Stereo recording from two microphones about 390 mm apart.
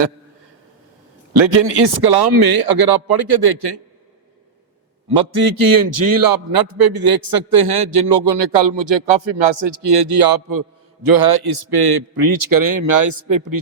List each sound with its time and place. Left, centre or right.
1.4 s a man's voice: right
2.0 s a man's voice: right
5.0 s a man's voice: right